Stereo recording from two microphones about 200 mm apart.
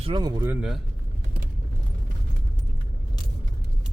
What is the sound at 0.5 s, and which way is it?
Speech, 5° right (ahead or behind).